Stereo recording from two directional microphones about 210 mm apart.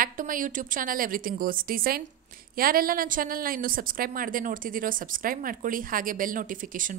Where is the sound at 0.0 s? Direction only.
40° right (ahead or behind).